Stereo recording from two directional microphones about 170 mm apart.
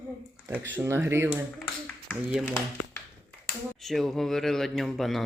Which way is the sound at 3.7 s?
Centre (ahead or behind).